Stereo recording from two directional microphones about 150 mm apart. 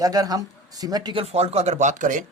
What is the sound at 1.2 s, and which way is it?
Speech, 45° right (ahead or behind).